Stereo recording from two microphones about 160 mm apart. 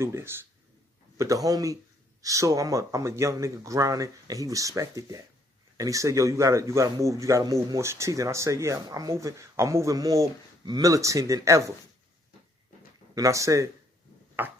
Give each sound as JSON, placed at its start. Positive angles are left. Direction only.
{"t": 0.0, "sound": "speech", "side_deg": -15}
{"t": 13.1, "sound": "speech", "side_deg": -20}